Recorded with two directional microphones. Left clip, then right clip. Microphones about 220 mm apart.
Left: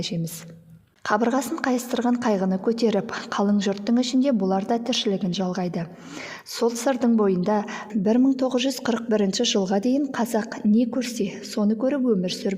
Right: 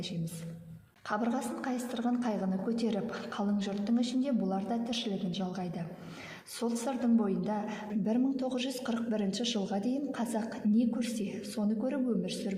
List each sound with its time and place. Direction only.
1.0 s a woman's voice: 45° left (ahead or behind)